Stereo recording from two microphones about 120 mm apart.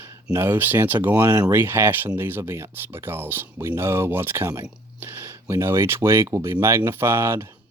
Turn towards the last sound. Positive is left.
turn(degrees=-20)  # may be behind; listen again after turning